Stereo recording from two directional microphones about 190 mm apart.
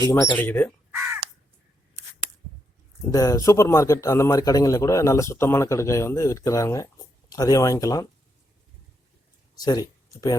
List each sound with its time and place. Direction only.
0.1 s a man's voice: 15° left (ahead or behind)
3.1 s a man's voice: 20° left (ahead or behind)
9.6 s speech: 20° left (ahead or behind)